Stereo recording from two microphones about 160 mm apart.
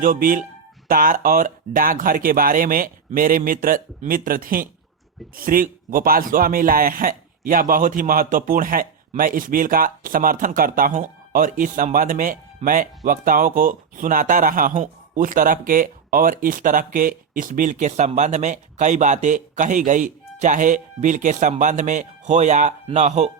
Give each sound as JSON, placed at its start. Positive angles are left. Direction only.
{"t": 0.0, "sound": "speech", "side_deg": -55}